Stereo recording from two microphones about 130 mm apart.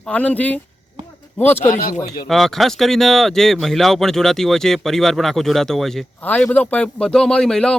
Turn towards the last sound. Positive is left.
turn(degrees=5)  # may be behind; listen again after turning